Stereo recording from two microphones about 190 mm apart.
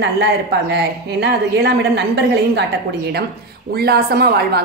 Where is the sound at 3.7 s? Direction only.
55° right (ahead or behind).